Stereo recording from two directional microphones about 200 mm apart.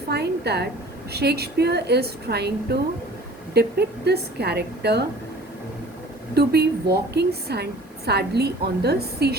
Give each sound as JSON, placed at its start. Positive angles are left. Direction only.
{"t": 0.1, "sound": "a woman's voice", "side_deg": -55}
{"t": 3.5, "sound": "a woman's voice", "side_deg": -55}
{"t": 6.3, "sound": "a woman's voice", "side_deg": -55}